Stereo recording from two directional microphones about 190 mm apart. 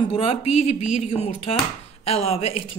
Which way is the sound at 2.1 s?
35° left (ahead or behind).